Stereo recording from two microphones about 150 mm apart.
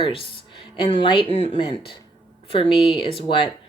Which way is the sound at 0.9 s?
35° left (ahead or behind).